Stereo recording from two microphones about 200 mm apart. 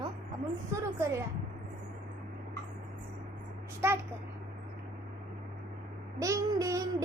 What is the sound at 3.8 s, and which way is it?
Speech, 10° right (ahead or behind).